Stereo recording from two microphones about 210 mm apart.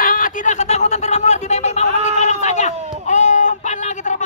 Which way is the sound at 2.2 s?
35° left (ahead or behind).